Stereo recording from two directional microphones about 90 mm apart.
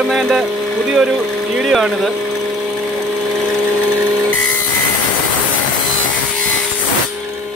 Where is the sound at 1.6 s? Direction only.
Centre (ahead or behind).